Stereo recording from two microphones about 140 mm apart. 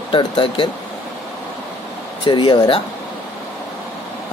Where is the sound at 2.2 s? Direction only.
35° left (ahead or behind).